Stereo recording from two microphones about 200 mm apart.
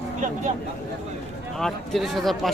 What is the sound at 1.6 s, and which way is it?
Speech, centre (ahead or behind).